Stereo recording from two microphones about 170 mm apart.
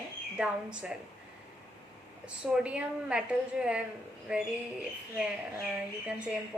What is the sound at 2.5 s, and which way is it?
A woman's voice, 5° right (ahead or behind).